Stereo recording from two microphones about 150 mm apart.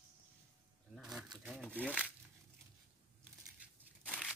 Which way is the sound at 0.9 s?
5° right (ahead or behind).